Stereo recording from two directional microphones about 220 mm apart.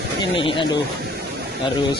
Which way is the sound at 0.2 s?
25° left (ahead or behind).